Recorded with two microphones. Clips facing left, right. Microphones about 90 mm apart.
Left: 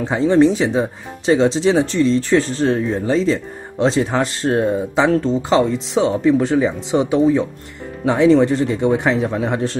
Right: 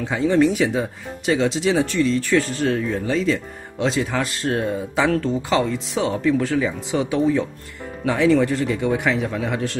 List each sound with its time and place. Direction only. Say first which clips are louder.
0.0 s speech: left 4 dB; 30° left (ahead or behind)